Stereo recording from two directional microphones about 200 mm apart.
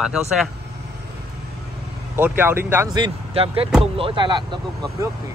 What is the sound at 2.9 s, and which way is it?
Speech, 25° right (ahead or behind).